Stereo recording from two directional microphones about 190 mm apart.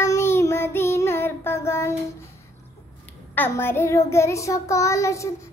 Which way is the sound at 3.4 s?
10° left (ahead or behind).